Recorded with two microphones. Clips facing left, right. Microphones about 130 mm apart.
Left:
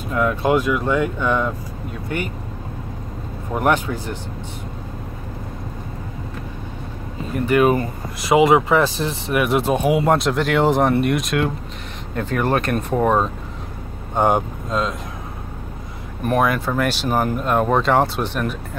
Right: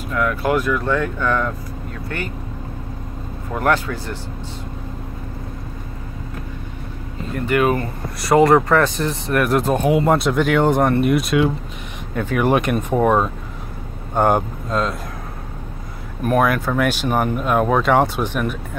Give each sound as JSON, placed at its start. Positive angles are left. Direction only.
{"t": 0.1, "sound": "speech", "side_deg": 25}
{"t": 3.5, "sound": "speech", "side_deg": 15}
{"t": 7.4, "sound": "speech", "side_deg": 20}
{"t": 8.3, "sound": "speech", "side_deg": 5}
{"t": 16.2, "sound": "speech", "side_deg": 0}